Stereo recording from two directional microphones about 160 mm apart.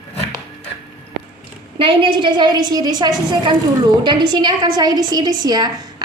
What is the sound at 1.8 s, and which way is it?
A woman's voice, 30° right (ahead or behind).